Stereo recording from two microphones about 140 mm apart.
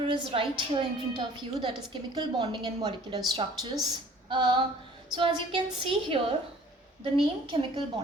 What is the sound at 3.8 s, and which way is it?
Female singing, 30° right (ahead or behind).